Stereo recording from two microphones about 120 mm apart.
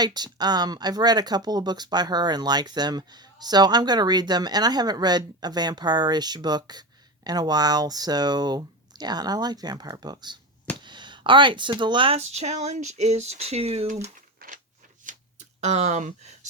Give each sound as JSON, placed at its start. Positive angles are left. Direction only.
{"t": 0.0, "sound": "speech", "side_deg": -35}
{"t": 12.1, "sound": "speech", "side_deg": -65}
{"t": 15.6, "sound": "speech", "side_deg": -70}